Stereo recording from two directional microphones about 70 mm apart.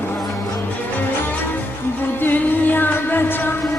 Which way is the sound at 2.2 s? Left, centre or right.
Left.